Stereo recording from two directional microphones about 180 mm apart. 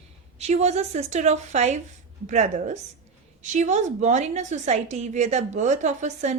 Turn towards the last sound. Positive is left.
turn(degrees=-40)  # may be behind; listen again after turning